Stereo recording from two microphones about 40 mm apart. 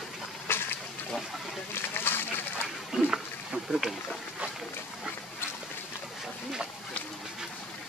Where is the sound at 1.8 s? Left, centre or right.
Left.